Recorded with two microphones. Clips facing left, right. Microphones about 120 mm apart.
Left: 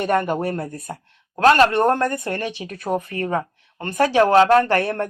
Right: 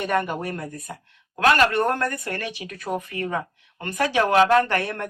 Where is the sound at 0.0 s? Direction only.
35° left (ahead or behind).